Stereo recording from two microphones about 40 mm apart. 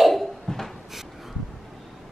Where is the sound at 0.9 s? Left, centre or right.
Centre.